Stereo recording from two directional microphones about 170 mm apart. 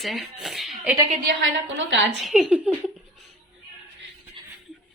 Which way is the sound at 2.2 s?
Centre (ahead or behind).